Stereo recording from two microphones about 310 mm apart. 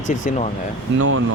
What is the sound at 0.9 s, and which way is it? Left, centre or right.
Speech, right.